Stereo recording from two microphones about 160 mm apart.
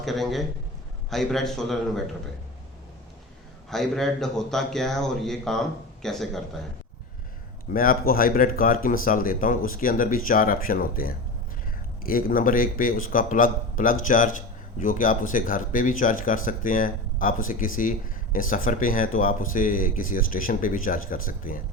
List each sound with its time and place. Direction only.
0.0 s a man's voice: centre (ahead or behind)
3.7 s a man's voice: centre (ahead or behind)
7.7 s speech: 60° left (ahead or behind)